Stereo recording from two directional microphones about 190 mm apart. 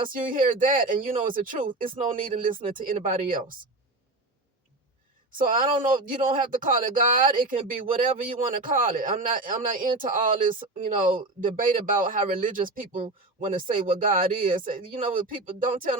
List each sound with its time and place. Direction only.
0.1 s speech: 45° right (ahead or behind)
5.3 s speech: 45° right (ahead or behind)